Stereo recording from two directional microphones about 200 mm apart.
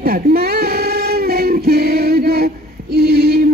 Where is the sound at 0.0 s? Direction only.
50° right (ahead or behind).